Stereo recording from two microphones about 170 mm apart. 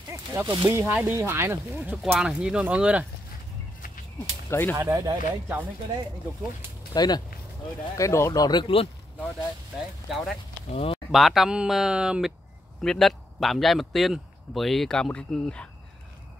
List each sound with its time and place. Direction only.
0.1 s snake: 15° right (ahead or behind)
0.6 s speech: 20° right (ahead or behind)
4.5 s speech: 10° left (ahead or behind)
4.7 s speech: 20° right (ahead or behind)
6.9 s speech: 25° left (ahead or behind)
10.0 s speech: centre (ahead or behind)
10.7 s speech: 35° left (ahead or behind)
11.1 s speech: centre (ahead or behind)